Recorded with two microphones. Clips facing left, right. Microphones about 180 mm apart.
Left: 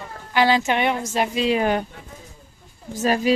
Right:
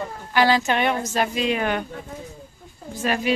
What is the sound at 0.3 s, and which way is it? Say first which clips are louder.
A woman's voice: left 1 dB; 20° left (ahead or behind).